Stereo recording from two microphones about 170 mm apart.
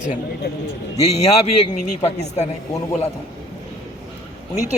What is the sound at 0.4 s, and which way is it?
Speech, 70° left (ahead or behind).